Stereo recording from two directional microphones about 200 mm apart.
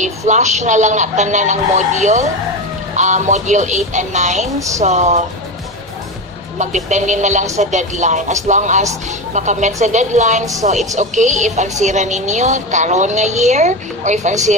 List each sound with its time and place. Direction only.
0.0 s speech: 35° right (ahead or behind)
6.6 s speech: 35° right (ahead or behind)